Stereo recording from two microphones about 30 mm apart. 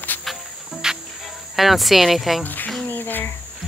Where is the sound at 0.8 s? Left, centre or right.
Right.